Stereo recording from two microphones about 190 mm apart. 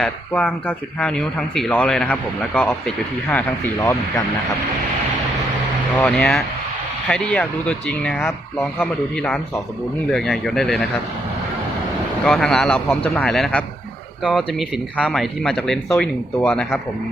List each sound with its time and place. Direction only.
0.0 s speech: 10° left (ahead or behind)
6.0 s speech: 5° left (ahead or behind)
12.2 s speech: 5° left (ahead or behind)